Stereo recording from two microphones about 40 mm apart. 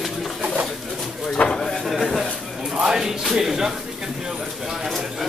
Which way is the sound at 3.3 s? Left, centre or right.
Centre.